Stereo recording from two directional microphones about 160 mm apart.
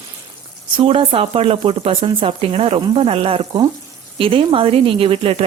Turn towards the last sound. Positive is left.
turn(degrees=-35)  # may be behind; listen again after turning